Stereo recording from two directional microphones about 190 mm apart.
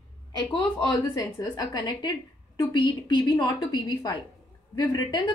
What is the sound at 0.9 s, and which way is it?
A woman's voice, 20° left (ahead or behind).